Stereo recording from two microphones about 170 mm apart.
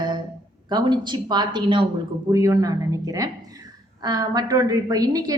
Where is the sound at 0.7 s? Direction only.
25° right (ahead or behind).